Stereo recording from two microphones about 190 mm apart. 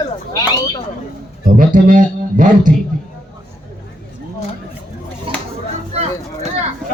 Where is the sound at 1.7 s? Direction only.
45° right (ahead or behind).